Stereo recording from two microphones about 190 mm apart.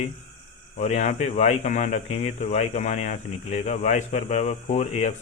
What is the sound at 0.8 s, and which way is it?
Speech, 40° left (ahead or behind).